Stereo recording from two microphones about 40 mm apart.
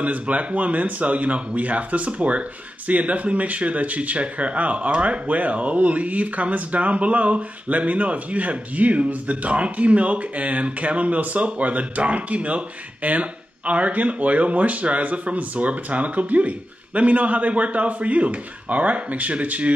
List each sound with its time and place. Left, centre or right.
0.0 s speech: right